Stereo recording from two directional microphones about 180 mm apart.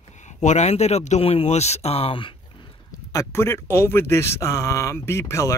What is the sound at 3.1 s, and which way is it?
A man's voice, 15° left (ahead or behind).